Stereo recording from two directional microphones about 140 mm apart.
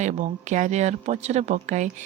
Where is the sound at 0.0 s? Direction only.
60° right (ahead or behind).